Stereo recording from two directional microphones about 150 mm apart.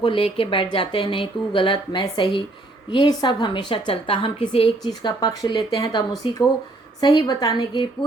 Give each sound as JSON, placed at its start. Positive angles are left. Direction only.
{"t": 0.0, "sound": "a woman's voice", "side_deg": 35}